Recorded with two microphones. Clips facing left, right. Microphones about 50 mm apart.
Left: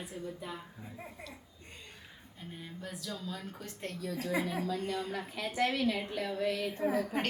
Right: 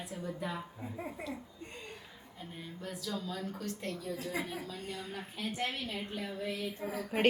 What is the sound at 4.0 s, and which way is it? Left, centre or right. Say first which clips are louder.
A woman's voice: left 3 dB; left.